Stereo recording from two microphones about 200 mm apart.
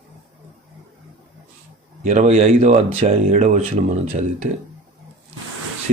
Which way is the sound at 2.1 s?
35° right (ahead or behind).